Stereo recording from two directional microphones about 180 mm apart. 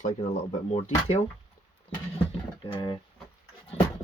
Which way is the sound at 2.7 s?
25° left (ahead or behind).